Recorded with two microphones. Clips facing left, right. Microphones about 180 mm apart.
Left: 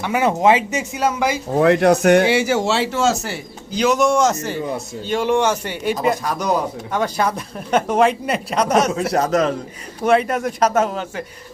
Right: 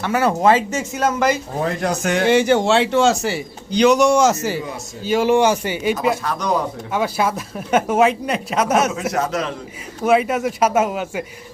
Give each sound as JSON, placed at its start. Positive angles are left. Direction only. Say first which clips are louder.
{"t": 0.0, "sound": "speech", "louder": "even", "side_deg": 15}
{"t": 1.5, "sound": "speech", "louder": "left 8 dB", "side_deg": 70}
{"t": 2.3, "sound": "a man's voice", "louder": "right 3 dB", "side_deg": 5}
{"t": 9.1, "sound": "a man's voice", "louder": "left 7 dB", "side_deg": 40}
{"t": 10.0, "sound": "a man's voice", "louder": "even", "side_deg": -5}